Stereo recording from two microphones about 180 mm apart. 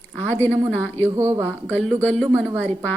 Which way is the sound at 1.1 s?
15° right (ahead or behind).